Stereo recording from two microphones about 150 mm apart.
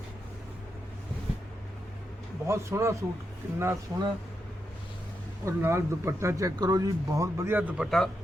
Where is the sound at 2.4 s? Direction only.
20° right (ahead or behind).